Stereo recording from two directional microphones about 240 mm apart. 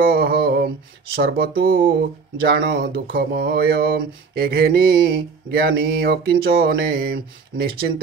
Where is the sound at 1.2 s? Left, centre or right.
Right.